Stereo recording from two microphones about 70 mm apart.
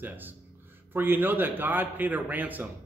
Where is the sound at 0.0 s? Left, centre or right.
Right.